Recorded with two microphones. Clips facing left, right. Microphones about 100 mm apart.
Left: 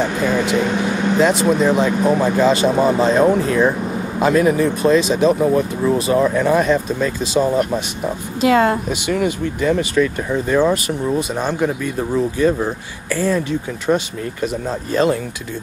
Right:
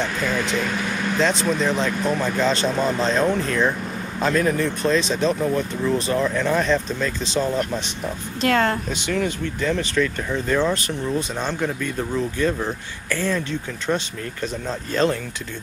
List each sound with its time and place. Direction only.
0.0 s speech: 15° left (ahead or behind)
1.2 s speech: 10° left (ahead or behind)